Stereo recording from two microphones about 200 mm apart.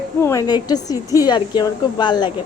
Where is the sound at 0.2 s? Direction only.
15° left (ahead or behind).